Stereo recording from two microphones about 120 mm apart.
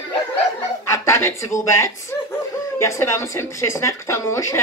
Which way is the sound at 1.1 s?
25° left (ahead or behind).